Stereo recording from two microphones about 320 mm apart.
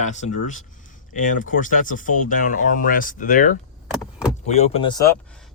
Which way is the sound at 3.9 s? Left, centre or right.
Centre.